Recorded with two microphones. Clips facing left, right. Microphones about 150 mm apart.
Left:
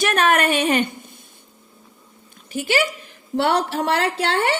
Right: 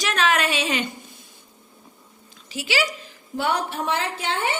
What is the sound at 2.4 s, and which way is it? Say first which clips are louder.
Speech: left 4 dB; 50° left (ahead or behind).